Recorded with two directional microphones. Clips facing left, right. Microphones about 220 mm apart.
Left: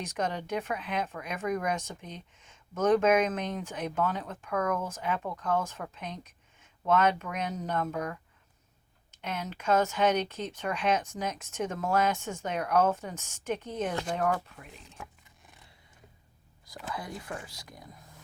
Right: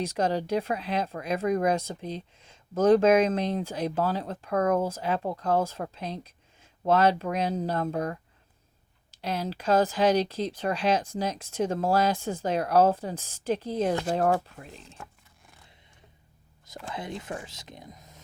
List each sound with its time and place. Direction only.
0.0 s speech: 30° right (ahead or behind)
14.8 s a sound: centre (ahead or behind)
16.9 s speech: 25° right (ahead or behind)